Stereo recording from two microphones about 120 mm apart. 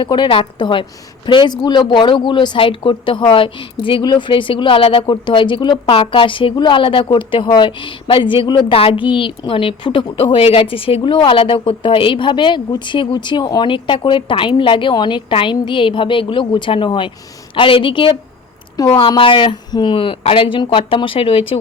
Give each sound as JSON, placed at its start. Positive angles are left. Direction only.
{"t": 0.0, "sound": "a woman's voice", "side_deg": 40}